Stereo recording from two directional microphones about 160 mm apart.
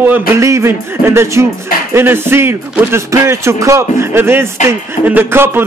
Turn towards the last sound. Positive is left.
turn(degrees=-15)  # may be behind; listen again after turning